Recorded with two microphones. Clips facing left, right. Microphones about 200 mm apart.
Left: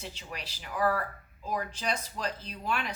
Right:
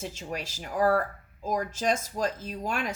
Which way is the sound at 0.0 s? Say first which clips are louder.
Right 7 dB; 45° right (ahead or behind).